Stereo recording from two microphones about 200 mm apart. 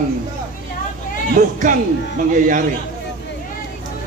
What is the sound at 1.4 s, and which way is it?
Speech, 35° right (ahead or behind).